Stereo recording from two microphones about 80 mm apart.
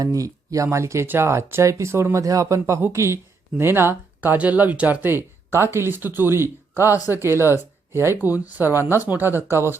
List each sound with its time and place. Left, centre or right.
0.0 s speech: right